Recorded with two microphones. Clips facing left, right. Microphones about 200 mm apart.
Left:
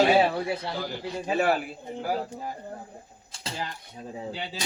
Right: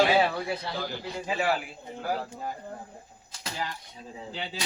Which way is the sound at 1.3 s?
50° left (ahead or behind).